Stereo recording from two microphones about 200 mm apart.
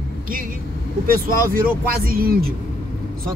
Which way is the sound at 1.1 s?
45° right (ahead or behind).